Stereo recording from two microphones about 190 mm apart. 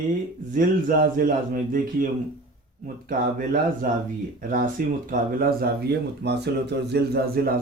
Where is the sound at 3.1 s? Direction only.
45° right (ahead or behind).